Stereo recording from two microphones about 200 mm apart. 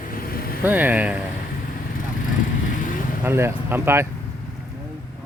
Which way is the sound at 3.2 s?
10° right (ahead or behind).